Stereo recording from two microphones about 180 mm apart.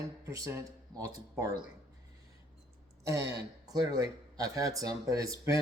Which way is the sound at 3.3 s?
20° right (ahead or behind).